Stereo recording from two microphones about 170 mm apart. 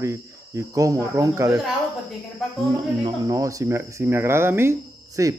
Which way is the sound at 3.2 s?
20° right (ahead or behind).